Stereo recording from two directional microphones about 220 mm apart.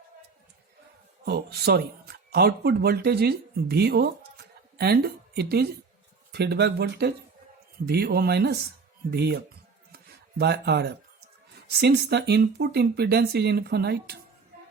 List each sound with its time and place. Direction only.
1.2 s speech: 45° right (ahead or behind)